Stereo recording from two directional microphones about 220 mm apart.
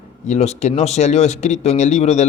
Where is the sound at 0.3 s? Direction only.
30° left (ahead or behind).